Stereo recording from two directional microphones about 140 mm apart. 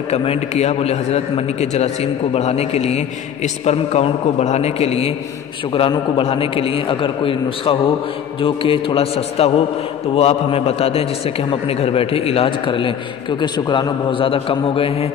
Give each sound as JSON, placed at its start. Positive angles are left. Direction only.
{"t": 0.1, "sound": "a man's voice", "side_deg": 45}